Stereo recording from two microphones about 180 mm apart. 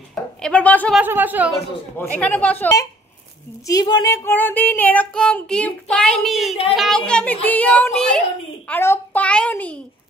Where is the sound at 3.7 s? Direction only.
20° left (ahead or behind).